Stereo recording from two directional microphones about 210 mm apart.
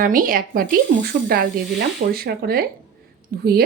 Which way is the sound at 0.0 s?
40° right (ahead or behind).